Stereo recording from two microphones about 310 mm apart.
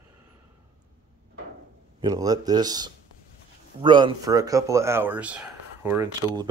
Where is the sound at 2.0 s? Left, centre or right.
Centre.